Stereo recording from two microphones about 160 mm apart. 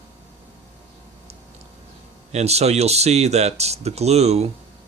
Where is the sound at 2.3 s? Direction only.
40° right (ahead or behind).